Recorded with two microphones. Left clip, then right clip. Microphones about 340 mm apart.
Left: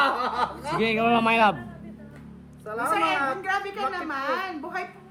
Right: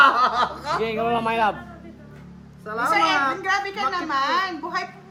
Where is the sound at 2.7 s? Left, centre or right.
Right.